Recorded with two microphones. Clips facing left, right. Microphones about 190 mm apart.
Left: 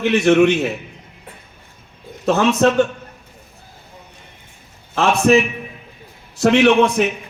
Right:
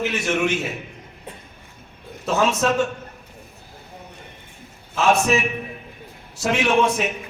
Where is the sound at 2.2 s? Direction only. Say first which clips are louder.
Left 5 dB; 65° left (ahead or behind).